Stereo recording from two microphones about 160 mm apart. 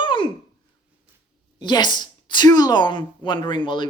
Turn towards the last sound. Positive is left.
turn(degrees=30)  # may be behind; listen again after turning